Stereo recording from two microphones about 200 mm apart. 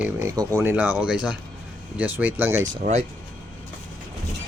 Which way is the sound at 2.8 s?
35° right (ahead or behind).